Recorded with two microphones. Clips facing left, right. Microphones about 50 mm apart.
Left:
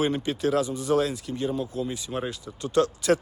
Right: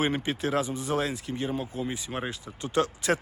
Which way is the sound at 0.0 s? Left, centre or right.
Right.